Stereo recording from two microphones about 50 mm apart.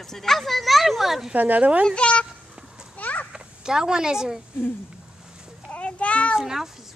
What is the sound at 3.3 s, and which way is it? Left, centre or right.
Speech, centre.